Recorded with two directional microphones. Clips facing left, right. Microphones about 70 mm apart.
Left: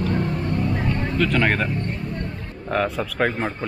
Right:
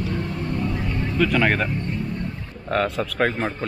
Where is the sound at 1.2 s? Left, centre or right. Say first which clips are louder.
Right 1 dB; centre.